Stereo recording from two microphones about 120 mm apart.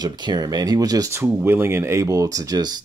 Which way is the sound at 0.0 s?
35° right (ahead or behind).